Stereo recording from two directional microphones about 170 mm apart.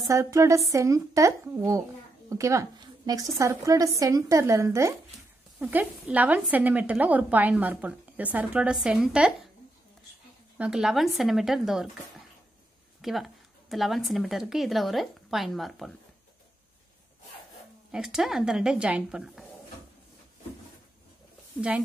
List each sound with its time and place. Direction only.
0.1 s a woman's voice: 20° right (ahead or behind)
10.6 s speech: 5° right (ahead or behind)
13.0 s speech: centre (ahead or behind)
17.9 s speech: 5° right (ahead or behind)
21.5 s speech: 5° right (ahead or behind)